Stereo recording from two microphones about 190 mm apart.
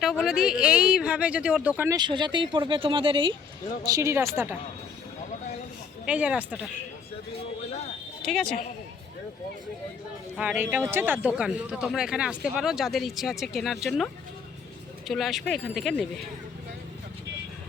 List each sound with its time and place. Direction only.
0.0 s speech: centre (ahead or behind)
2.0 s speech: 25° right (ahead or behind)
6.1 s speech: 5° right (ahead or behind)
8.2 s speech: centre (ahead or behind)
10.3 s speech: 5° right (ahead or behind)